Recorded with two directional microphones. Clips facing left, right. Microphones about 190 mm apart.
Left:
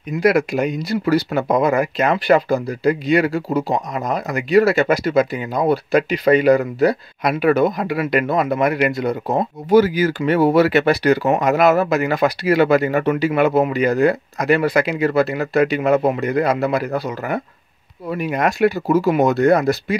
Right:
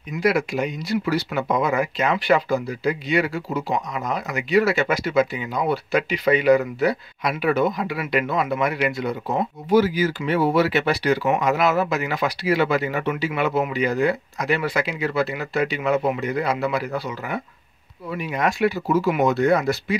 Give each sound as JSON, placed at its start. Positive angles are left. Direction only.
{"t": 0.2, "sound": "speech", "side_deg": 45}